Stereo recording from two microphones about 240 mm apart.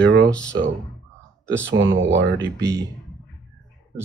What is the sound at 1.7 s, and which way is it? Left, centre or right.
Speech, right.